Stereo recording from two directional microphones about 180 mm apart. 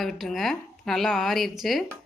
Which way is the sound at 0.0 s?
Centre (ahead or behind).